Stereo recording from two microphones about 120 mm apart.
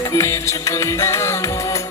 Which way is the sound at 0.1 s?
25° left (ahead or behind).